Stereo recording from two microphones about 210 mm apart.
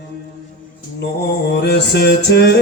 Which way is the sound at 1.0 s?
55° left (ahead or behind).